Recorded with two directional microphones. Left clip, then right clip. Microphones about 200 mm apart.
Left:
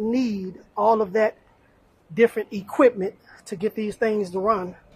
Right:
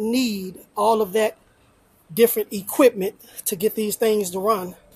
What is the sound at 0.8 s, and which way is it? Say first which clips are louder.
Speech: even; 15° right (ahead or behind).